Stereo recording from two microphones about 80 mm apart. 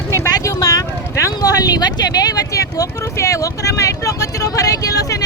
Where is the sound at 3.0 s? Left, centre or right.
Left.